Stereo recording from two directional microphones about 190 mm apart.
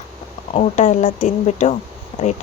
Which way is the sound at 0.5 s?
35° left (ahead or behind).